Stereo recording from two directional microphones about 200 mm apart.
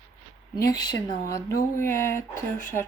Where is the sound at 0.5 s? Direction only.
20° left (ahead or behind).